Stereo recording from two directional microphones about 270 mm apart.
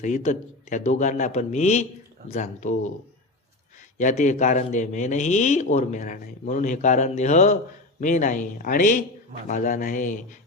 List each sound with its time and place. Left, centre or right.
0.0 s a man's voice: left
3.9 s a man's voice: left